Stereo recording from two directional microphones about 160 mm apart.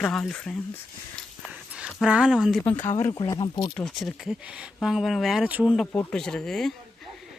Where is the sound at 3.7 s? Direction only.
Centre (ahead or behind).